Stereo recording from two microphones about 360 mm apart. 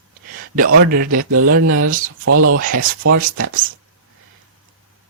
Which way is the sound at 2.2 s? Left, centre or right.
Right.